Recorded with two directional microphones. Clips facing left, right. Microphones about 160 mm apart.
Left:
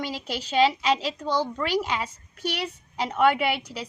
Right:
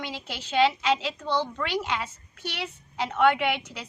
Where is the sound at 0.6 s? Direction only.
40° left (ahead or behind).